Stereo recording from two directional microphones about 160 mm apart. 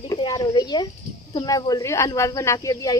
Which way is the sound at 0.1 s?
25° left (ahead or behind).